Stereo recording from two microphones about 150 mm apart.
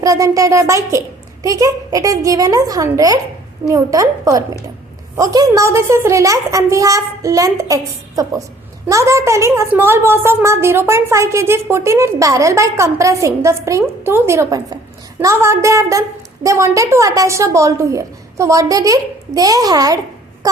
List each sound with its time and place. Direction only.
0.0 s a woman's voice: 20° right (ahead or behind)